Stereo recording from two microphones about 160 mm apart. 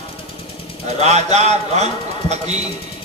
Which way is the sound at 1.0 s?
45° right (ahead or behind).